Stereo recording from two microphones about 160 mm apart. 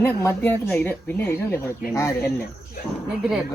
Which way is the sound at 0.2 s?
15° left (ahead or behind).